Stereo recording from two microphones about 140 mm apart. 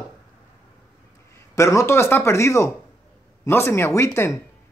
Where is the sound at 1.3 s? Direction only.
20° left (ahead or behind).